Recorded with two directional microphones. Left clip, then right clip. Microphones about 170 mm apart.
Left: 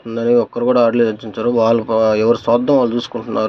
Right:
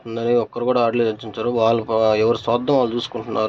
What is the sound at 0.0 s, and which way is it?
Speech, centre (ahead or behind).